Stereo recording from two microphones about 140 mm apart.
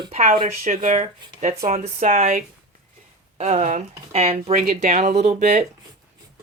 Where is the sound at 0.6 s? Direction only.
55° right (ahead or behind).